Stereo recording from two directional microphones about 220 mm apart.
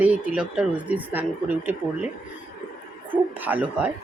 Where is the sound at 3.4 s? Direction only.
5° right (ahead or behind).